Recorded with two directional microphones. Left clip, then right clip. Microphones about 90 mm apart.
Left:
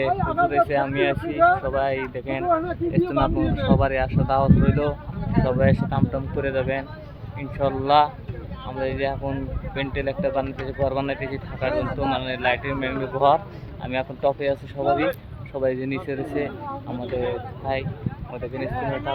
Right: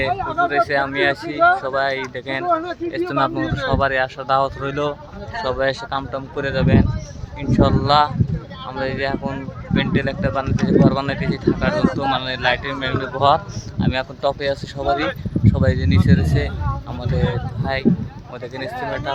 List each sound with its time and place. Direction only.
0.1 s speech: 85° right
0.5 s speech: 10° right (ahead or behind)
2.5 s speech: 35° right (ahead or behind)
2.9 s speech: 20° right (ahead or behind)
10.4 s speech: 5° left (ahead or behind)
10.8 s speech: 10° right (ahead or behind); by 19.1 s 25° right (ahead or behind)